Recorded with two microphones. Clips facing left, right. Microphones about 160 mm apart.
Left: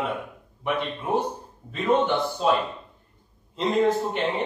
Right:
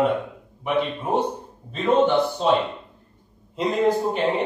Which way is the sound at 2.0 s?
15° right (ahead or behind).